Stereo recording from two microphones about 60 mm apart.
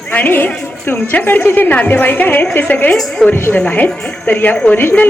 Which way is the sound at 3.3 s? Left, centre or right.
Left.